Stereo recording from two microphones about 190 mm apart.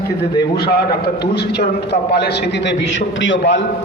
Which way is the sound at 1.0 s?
60° left (ahead or behind).